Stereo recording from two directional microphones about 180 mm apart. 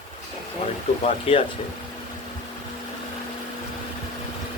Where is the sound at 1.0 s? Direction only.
35° left (ahead or behind).